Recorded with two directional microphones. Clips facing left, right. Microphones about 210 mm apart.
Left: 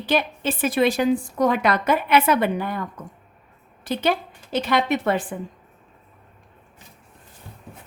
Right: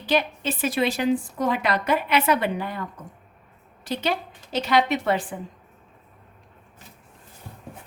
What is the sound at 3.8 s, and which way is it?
A woman's voice, 55° left (ahead or behind).